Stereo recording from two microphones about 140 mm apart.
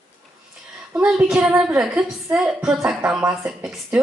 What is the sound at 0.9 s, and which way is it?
A woman's voice, 10° right (ahead or behind).